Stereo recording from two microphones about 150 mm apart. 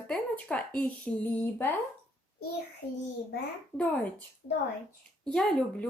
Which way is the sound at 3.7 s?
10° left (ahead or behind).